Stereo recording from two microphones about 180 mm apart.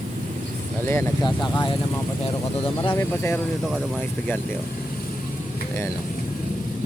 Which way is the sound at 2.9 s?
10° left (ahead or behind).